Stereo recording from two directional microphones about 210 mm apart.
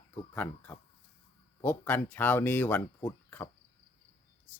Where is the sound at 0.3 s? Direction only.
10° left (ahead or behind).